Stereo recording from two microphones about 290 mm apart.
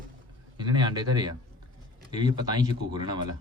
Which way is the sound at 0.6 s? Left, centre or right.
Centre.